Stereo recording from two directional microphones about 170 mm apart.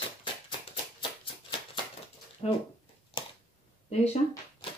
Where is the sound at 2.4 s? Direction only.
35° left (ahead or behind).